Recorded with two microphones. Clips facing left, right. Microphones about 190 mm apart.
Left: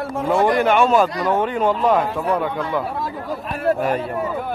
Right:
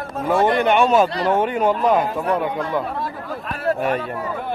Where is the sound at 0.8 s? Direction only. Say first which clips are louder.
Even; 20° right (ahead or behind).